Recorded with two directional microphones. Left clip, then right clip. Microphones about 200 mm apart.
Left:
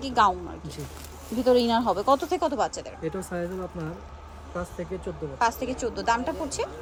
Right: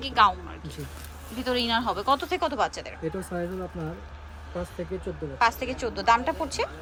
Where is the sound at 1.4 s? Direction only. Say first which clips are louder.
Left 5 dB; 30° left (ahead or behind).